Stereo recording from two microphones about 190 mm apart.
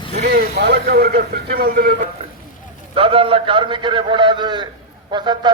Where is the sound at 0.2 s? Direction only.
55° right (ahead or behind).